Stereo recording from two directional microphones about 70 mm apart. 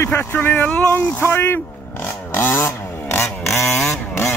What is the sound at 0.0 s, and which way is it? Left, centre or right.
Speech, left.